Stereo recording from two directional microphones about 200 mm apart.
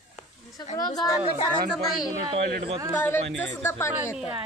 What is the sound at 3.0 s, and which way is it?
Speech, 10° left (ahead or behind).